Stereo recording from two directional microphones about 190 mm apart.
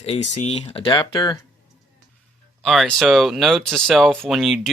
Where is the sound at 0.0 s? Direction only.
35° left (ahead or behind).